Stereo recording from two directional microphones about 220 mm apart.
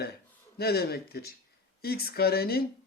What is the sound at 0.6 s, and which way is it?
Speech, 45° left (ahead or behind).